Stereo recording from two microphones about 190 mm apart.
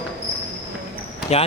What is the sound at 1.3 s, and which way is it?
Speech, 35° left (ahead or behind).